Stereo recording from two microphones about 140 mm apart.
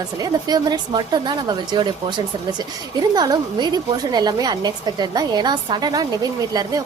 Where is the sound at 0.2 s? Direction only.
30° right (ahead or behind).